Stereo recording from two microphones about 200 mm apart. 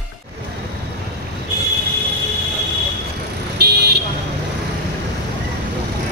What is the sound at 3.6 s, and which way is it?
Vehicle, 55° right (ahead or behind).